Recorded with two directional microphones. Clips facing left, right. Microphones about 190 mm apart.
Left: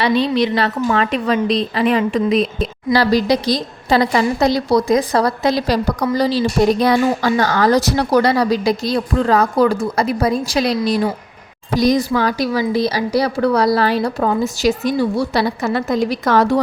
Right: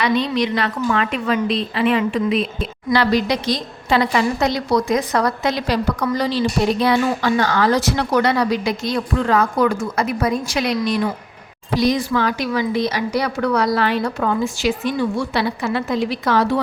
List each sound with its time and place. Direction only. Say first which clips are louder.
0.0 s a woman's voice: left 3 dB; 30° left (ahead or behind)